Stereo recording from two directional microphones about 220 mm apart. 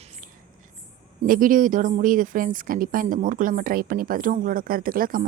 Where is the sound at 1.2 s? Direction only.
40° right (ahead or behind).